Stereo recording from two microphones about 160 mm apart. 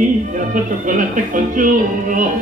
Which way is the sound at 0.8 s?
55° right (ahead or behind).